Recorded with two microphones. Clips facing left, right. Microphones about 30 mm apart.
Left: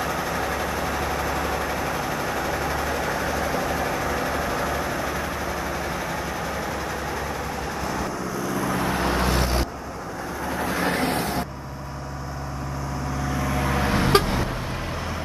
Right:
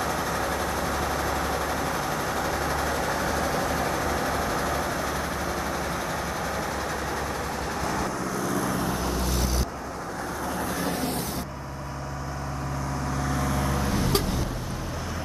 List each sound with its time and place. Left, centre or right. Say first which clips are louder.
0.0 s vehicle: left 1 dB; centre
7.8 s vehicle: even; centre
8.7 s vehicle: left 4 dB; left
13.2 s vehicle: left 2 dB; centre
13.6 s vehicle: left 4 dB; left